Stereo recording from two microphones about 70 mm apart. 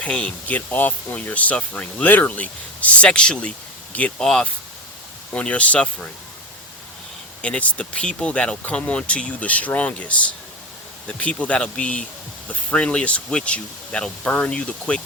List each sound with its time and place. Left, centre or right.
0.0 s speech: centre
7.4 s speech: centre